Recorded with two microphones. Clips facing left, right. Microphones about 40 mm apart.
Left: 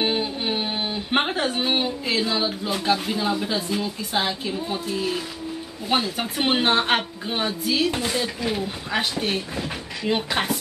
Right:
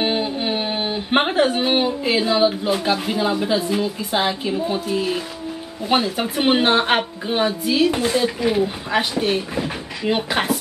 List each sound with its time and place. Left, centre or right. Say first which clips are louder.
0.0 s a woman's voice: right 3 dB; centre